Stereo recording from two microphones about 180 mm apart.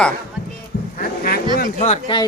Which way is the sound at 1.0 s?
55° left (ahead or behind).